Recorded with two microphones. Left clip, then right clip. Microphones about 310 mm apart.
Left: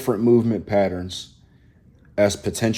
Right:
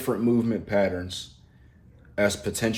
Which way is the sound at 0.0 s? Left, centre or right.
Centre.